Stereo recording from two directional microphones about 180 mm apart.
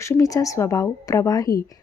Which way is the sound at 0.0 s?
15° left (ahead or behind).